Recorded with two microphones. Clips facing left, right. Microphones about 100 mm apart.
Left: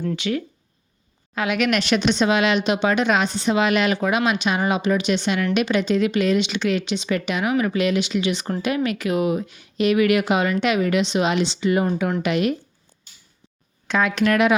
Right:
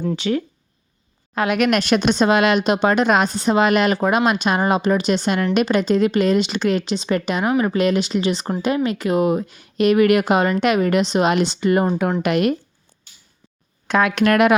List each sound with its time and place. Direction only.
0.2 s speech: 35° right (ahead or behind)
1.4 s speech: 45° right (ahead or behind)
13.8 s speech: 55° right (ahead or behind)